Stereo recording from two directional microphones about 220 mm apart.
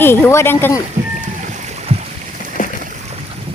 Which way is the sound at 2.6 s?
35° left (ahead or behind).